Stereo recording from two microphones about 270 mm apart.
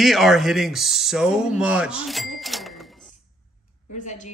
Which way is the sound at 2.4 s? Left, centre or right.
Centre.